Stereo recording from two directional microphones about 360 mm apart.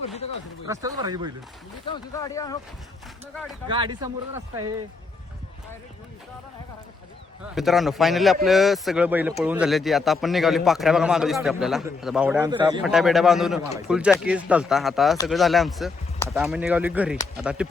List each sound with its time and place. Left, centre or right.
0.0 s a sound: centre
0.7 s speech: centre
1.9 s speech: centre
3.7 s speech: centre
7.4 s a man's voice: centre
12.8 s a man's voice: centre